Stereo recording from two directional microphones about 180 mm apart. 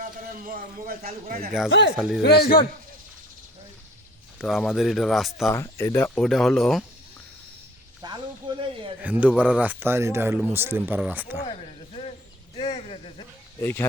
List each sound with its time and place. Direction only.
0.0 s a man's voice: 55° right (ahead or behind)
2.0 s speech: centre (ahead or behind)
2.2 s a man's voice: 60° left (ahead or behind)
4.4 s speech: centre (ahead or behind)
5.5 s speech: 15° left (ahead or behind)
6.1 s speech: centre (ahead or behind)
8.0 s speech: 25° right (ahead or behind)
9.0 s speech: 10° right (ahead or behind)
12.5 s a sound: 35° left (ahead or behind)
13.6 s speech: 15° left (ahead or behind)